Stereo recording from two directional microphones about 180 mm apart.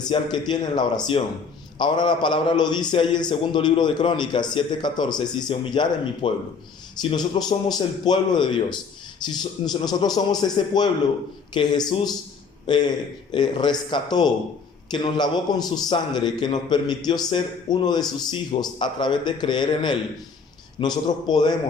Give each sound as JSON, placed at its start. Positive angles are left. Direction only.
{"t": 0.0, "sound": "a man's voice", "side_deg": 25}